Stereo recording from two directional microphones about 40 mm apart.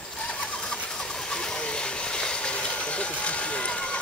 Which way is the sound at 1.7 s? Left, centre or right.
Left.